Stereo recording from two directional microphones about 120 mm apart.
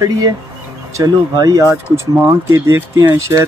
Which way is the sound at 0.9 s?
30° right (ahead or behind).